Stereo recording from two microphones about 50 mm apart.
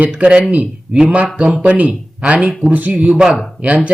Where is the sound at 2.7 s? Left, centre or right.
Right.